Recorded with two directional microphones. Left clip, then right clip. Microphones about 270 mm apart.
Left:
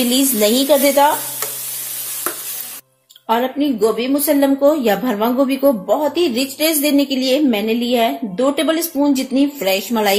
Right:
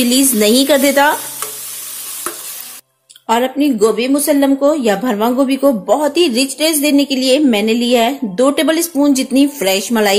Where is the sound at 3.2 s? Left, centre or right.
Centre.